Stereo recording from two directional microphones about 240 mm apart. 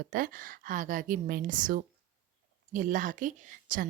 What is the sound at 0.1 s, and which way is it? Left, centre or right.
A woman's voice, right.